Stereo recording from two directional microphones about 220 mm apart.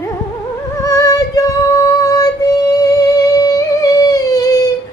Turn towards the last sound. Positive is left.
turn(degrees=15)  # may be behind; listen again after turning